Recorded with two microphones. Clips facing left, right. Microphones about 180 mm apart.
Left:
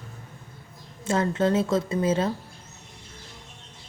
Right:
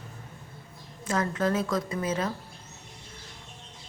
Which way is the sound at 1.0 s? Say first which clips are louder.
Left 4 dB; 25° left (ahead or behind).